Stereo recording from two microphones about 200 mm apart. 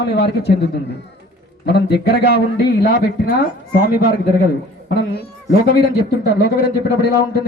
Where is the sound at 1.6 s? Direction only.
55° left (ahead or behind).